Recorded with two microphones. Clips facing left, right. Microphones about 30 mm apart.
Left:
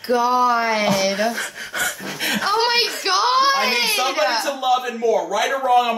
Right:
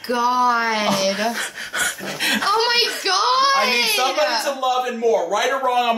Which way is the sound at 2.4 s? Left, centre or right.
Centre.